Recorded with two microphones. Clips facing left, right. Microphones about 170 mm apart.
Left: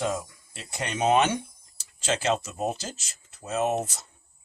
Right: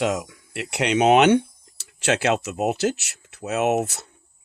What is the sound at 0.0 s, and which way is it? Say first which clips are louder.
Speech: right 5 dB; 80° right.